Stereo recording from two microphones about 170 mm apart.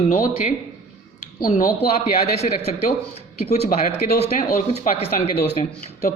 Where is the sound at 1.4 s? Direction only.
60° left (ahead or behind).